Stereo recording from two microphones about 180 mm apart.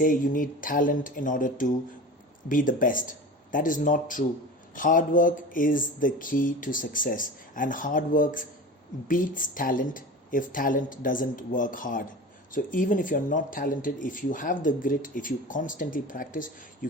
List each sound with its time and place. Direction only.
0.0 s speech: 50° left (ahead or behind)